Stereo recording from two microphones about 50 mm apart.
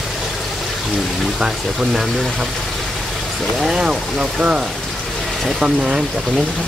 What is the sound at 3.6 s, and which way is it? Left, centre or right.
Speech, centre.